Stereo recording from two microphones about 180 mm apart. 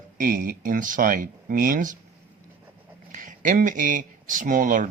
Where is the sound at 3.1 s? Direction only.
50° right (ahead or behind).